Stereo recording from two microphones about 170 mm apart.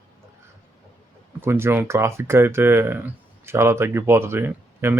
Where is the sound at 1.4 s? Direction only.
15° right (ahead or behind).